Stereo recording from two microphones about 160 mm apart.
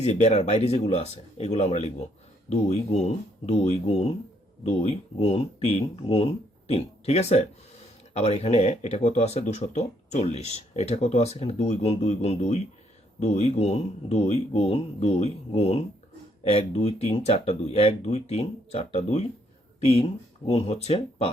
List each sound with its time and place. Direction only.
0.0 s speech: 45° left (ahead or behind)